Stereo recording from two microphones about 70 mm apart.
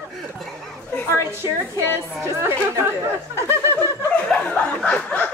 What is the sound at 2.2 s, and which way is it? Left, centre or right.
Speech, right.